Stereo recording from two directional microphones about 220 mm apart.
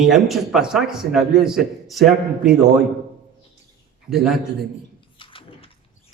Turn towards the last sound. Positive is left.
turn(degrees=25)  # may be behind; listen again after turning